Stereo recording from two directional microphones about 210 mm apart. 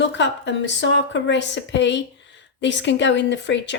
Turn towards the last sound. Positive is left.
turn(degrees=55)  # may be behind; listen again after turning